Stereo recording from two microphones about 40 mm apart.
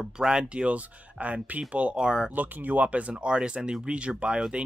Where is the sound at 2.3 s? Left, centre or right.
Right.